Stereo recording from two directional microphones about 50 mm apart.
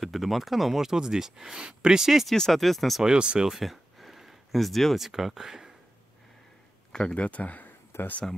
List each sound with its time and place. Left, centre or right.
0.0 s speech: centre
2.3 s speech: centre
3.0 s speech: centre
3.5 s speech: centre
6.9 s speech: centre
7.9 s speech: left